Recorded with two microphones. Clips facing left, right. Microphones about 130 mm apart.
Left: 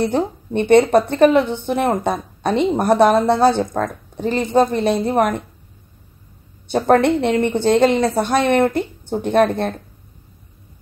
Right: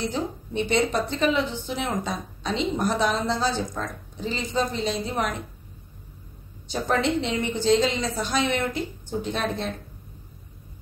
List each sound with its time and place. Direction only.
0.0 s a woman's voice: 60° left (ahead or behind)
6.7 s a woman's voice: 60° left (ahead or behind)